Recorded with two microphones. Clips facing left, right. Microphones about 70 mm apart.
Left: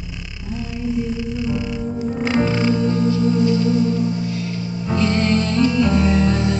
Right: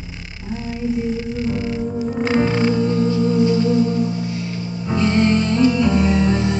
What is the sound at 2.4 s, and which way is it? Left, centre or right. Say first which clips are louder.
Music: right 1 dB; centre.